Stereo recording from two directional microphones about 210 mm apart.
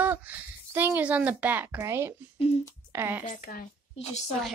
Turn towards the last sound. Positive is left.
turn(degrees=30)  # may be behind; listen again after turning